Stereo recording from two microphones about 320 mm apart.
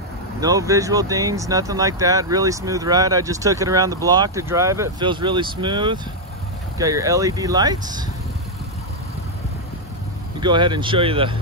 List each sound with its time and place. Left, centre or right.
0.4 s speech: centre
10.4 s speech: centre